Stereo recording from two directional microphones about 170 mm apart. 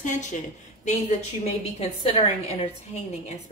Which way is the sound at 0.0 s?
45° left (ahead or behind).